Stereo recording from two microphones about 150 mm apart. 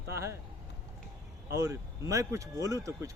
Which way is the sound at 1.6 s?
20° right (ahead or behind).